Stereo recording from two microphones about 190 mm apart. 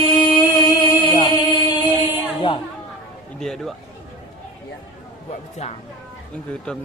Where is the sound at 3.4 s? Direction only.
Centre (ahead or behind).